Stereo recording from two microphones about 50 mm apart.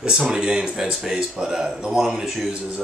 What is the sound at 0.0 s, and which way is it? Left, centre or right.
Speech, centre.